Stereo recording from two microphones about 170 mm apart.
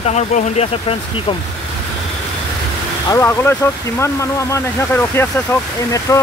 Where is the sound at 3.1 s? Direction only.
15° left (ahead or behind).